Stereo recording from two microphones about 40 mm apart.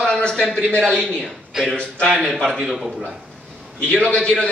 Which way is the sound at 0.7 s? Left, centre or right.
Left.